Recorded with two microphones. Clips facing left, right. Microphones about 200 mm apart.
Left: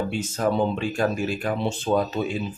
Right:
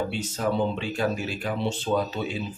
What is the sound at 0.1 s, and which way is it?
Speech, 45° left (ahead or behind).